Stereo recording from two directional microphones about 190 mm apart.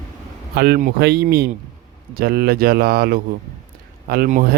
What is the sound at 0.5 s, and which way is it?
Speech, 55° right (ahead or behind).